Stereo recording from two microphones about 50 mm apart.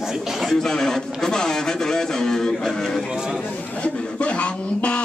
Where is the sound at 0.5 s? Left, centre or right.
Centre.